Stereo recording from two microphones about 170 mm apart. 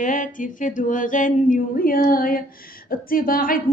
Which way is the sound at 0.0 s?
50° left (ahead or behind).